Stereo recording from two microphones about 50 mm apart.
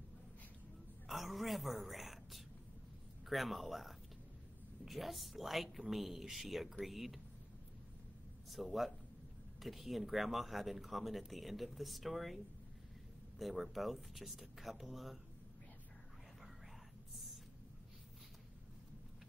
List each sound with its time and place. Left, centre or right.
1.0 s speech: centre
8.5 s speech: centre
13.4 s speech: centre